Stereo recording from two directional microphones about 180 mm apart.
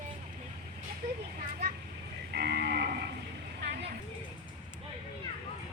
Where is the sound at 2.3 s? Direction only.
65° right (ahead or behind).